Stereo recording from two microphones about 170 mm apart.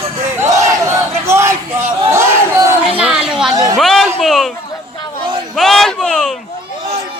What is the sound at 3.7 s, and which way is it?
Music, centre (ahead or behind).